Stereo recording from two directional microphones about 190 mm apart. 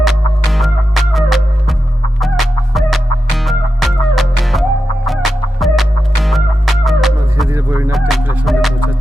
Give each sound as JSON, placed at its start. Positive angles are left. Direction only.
{"t": 0.0, "sound": "music", "side_deg": 0}
{"t": 5.0, "sound": "fowl", "side_deg": 0}
{"t": 7.5, "sound": "a sound", "side_deg": -15}
{"t": 7.9, "sound": "music", "side_deg": 0}